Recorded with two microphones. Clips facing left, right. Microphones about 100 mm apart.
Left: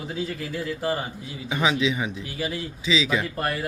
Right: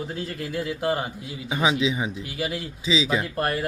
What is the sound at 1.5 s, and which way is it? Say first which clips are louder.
Speech: even; 20° right (ahead or behind).